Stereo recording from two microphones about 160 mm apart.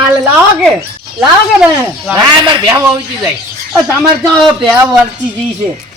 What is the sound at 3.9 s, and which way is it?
Speech, centre (ahead or behind).